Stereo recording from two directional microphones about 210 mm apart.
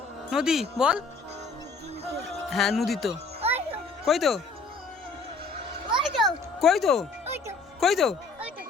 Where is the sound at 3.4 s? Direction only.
30° right (ahead or behind).